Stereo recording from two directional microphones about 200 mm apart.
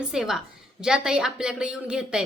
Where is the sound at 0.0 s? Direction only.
Centre (ahead or behind).